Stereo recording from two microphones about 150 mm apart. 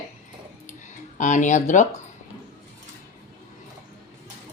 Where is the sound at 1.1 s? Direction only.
55° left (ahead or behind).